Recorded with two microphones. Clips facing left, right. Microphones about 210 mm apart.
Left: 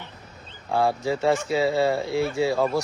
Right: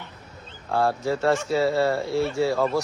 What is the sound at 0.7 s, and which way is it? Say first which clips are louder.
Speech: even; 15° left (ahead or behind).